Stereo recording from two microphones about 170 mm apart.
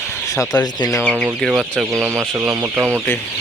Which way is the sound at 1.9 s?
15° right (ahead or behind).